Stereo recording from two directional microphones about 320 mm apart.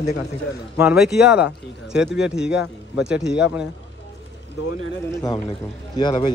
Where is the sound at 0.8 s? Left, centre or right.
Centre.